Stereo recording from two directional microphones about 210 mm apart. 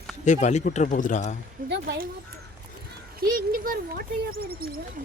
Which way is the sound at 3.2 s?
45° right (ahead or behind).